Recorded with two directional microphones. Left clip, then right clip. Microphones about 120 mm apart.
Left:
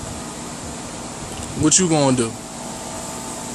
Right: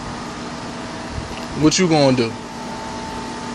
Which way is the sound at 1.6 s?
20° left (ahead or behind).